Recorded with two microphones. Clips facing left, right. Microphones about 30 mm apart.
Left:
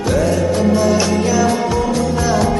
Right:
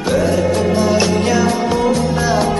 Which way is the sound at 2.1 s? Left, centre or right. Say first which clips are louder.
Even; right.